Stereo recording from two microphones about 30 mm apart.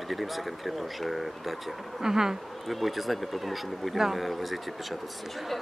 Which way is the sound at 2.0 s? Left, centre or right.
Centre.